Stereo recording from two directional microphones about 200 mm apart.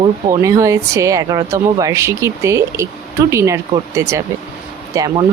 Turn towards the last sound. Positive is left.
turn(degrees=-15)  # may be behind; listen again after turning